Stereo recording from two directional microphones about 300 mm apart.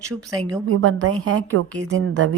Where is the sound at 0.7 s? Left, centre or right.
Right.